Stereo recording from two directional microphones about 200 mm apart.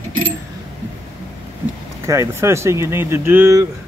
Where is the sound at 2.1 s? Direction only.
15° right (ahead or behind).